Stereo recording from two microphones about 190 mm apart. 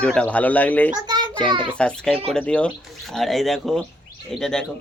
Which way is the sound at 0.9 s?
20° right (ahead or behind).